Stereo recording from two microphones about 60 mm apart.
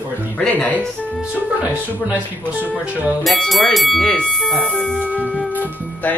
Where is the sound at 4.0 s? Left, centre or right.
Centre.